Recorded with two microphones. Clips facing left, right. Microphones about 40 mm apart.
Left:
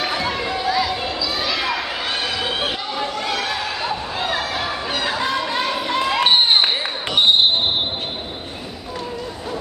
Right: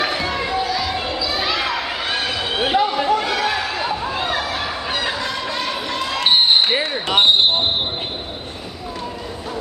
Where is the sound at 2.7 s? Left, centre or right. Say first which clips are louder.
Right 8 dB; centre.